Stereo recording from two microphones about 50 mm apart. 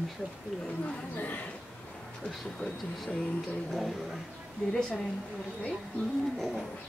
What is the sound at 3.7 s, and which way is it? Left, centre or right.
Speech, centre.